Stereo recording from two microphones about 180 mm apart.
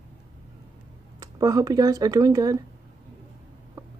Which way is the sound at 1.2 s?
20° right (ahead or behind).